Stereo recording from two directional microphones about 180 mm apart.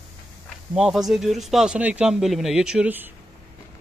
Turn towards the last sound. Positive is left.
turn(degrees=-10)  # may be behind; listen again after turning